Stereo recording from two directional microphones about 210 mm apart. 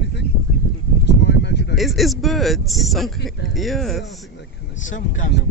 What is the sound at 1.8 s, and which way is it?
Speech, centre (ahead or behind).